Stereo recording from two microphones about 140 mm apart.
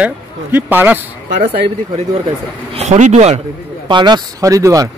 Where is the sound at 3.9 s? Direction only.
30° right (ahead or behind).